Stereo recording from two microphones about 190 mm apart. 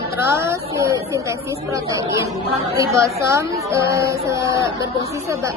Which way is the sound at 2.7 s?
15° right (ahead or behind).